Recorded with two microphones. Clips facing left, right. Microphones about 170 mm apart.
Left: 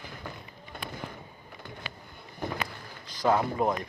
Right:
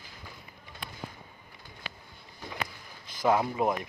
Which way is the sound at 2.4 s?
60° left (ahead or behind).